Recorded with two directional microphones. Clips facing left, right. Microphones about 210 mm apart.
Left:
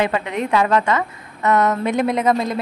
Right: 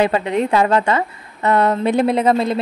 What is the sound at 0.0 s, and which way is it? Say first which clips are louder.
A woman's voice: right 4 dB; 30° right (ahead or behind).